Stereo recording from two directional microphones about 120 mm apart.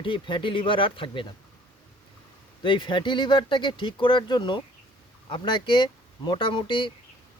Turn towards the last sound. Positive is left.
turn(degrees=45)  # may be behind; listen again after turning